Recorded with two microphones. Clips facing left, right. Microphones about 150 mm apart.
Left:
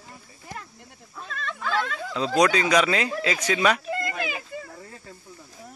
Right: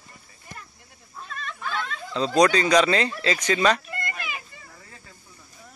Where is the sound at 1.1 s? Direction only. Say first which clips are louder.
Left 2 dB; 90° left.